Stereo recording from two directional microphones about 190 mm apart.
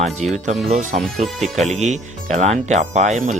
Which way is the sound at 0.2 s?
35° right (ahead or behind).